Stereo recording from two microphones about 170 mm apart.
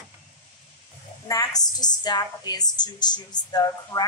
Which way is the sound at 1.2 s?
20° left (ahead or behind).